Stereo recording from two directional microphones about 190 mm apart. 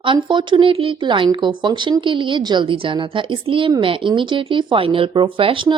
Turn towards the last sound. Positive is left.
turn(degrees=-25)  # may be behind; listen again after turning